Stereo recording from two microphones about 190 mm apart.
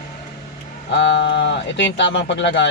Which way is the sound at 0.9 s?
70° left (ahead or behind).